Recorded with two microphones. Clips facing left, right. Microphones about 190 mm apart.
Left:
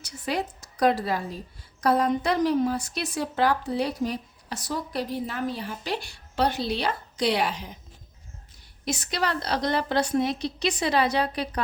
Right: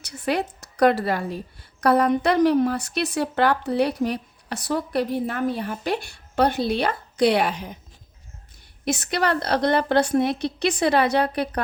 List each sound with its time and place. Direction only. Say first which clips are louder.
0.0 s a woman's voice: right 4 dB; 70° right (ahead or behind)
8.8 s a woman's voice: right 5 dB; 60° right (ahead or behind)